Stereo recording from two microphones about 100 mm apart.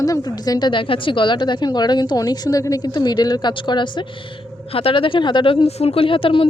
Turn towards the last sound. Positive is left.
turn(degrees=60)  # may be behind; listen again after turning